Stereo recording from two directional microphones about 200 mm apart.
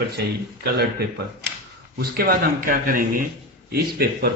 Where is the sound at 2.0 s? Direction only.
50° right (ahead or behind).